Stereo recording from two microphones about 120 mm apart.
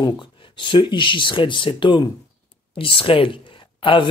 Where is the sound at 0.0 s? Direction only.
40° left (ahead or behind).